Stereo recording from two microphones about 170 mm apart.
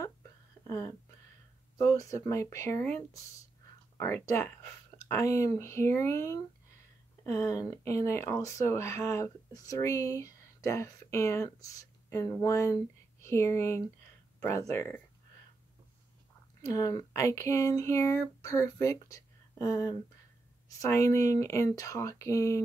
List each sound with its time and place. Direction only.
0.0 s a sound: 15° left (ahead or behind)
1.8 s speech: 20° left (ahead or behind)
16.6 s speech: 20° left (ahead or behind)